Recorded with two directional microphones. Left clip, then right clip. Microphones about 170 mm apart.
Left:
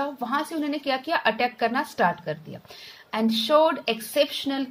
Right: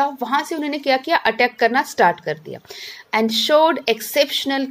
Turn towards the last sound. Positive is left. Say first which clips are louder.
# right 6 dB
turn(degrees=-25)  # may be behind; listen again after turning